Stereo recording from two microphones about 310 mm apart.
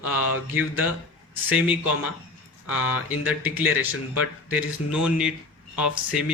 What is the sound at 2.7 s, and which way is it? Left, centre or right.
Speech, left.